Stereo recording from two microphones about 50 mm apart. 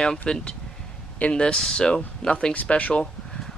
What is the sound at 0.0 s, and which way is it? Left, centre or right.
Speech, centre.